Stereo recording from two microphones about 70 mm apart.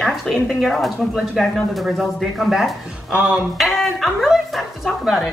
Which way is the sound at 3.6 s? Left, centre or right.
Centre.